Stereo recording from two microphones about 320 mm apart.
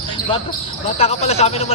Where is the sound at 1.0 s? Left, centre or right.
Centre.